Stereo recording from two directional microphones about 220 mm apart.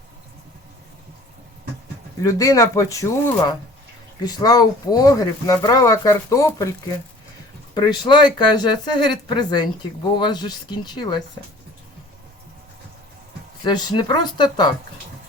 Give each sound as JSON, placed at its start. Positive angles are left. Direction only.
{"t": 2.2, "sound": "speech", "side_deg": 15}
{"t": 7.8, "sound": "speech", "side_deg": 20}
{"t": 13.7, "sound": "speech", "side_deg": 20}